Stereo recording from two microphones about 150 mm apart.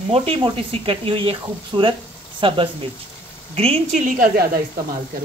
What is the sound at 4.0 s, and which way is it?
Speech, 65° right (ahead or behind).